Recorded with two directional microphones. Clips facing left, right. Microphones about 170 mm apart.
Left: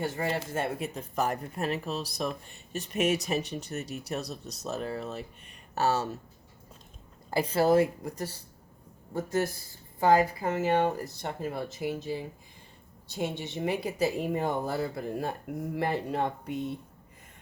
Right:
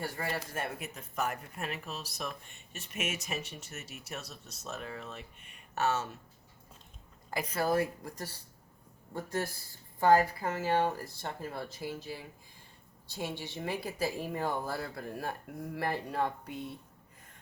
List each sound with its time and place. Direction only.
0.0 s speech: 25° left (ahead or behind)
7.3 s speech: 30° left (ahead or behind)